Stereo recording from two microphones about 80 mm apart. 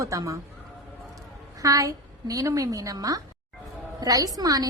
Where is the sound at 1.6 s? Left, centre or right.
Right.